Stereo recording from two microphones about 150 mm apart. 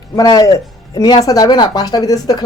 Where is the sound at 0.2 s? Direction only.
25° left (ahead or behind).